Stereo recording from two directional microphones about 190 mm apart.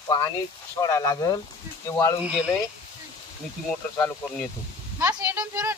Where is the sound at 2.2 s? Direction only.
5° right (ahead or behind).